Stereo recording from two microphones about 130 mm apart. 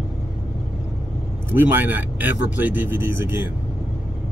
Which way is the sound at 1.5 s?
15° right (ahead or behind).